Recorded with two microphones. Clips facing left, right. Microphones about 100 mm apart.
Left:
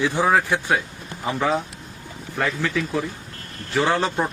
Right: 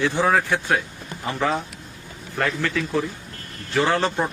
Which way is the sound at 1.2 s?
5° left (ahead or behind).